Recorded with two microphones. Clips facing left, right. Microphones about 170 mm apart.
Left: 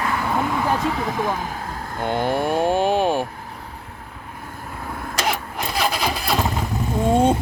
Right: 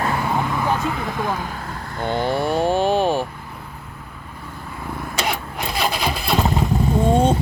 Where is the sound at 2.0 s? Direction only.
45° left (ahead or behind).